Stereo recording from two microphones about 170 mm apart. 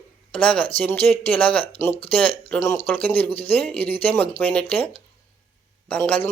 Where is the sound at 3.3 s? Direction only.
35° left (ahead or behind).